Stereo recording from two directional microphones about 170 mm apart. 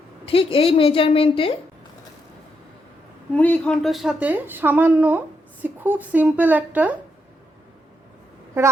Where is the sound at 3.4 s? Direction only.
5° left (ahead or behind); by 6.9 s 10° right (ahead or behind).